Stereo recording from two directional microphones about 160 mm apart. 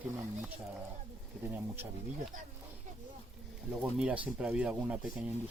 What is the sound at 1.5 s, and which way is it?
Speech, 15° right (ahead or behind).